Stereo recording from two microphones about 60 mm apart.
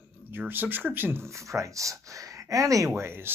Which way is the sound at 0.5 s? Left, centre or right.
Right.